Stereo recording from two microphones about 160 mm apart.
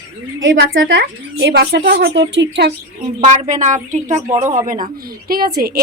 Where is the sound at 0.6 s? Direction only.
85° right.